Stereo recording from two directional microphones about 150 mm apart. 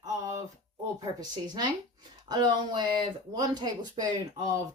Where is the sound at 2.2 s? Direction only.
25° right (ahead or behind).